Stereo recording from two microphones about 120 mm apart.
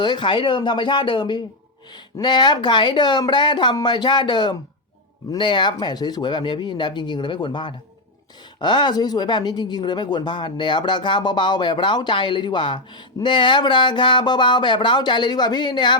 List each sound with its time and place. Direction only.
0.0 s speech: 40° left (ahead or behind)